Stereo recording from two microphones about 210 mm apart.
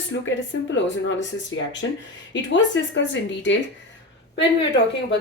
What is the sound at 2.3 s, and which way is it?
Speech, 60° left (ahead or behind).